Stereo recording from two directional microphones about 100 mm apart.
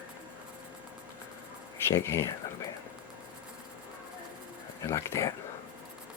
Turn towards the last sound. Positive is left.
turn(degrees=30)  # may be behind; listen again after turning